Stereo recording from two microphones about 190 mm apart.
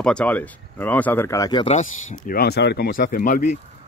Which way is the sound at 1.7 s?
40° left (ahead or behind).